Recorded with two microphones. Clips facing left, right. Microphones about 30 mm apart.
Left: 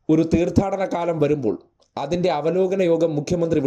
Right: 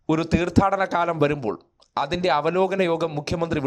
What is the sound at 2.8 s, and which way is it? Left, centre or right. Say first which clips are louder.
Speech: left 4 dB; right.